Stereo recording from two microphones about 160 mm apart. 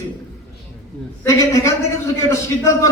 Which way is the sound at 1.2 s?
20° left (ahead or behind).